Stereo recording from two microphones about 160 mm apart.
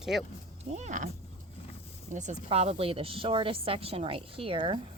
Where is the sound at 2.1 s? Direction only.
45° right (ahead or behind).